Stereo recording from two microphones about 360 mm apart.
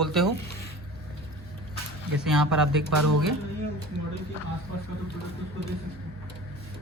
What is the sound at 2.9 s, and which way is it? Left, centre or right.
Speech, right.